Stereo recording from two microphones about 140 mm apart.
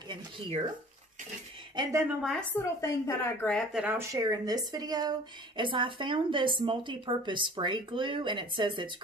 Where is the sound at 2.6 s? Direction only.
20° left (ahead or behind).